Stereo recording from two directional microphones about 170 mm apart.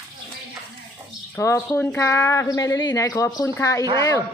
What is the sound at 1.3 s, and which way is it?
A woman's voice, 20° left (ahead or behind).